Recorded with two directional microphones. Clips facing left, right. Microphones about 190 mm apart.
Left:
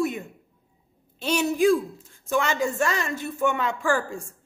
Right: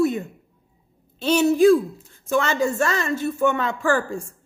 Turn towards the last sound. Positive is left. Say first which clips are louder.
# right 3 dB
turn(degrees=10)  # may be behind; listen again after turning